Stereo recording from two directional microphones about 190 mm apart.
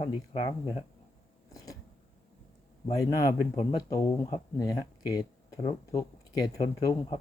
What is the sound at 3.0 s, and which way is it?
Speech, 15° left (ahead or behind).